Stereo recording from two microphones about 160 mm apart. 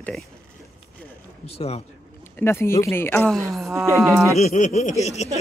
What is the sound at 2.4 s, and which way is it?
Speech, 15° left (ahead or behind).